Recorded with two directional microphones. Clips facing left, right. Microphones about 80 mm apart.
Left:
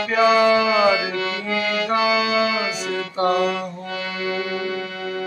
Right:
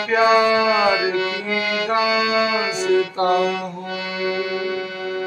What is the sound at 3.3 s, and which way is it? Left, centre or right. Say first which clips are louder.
Mantra: left 1 dB; right.